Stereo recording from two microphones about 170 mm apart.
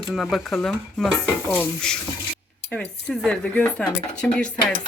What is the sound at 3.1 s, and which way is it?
Speech, 5° left (ahead or behind).